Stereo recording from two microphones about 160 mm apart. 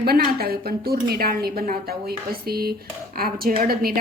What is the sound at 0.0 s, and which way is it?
A woman's voice, 70° right (ahead or behind).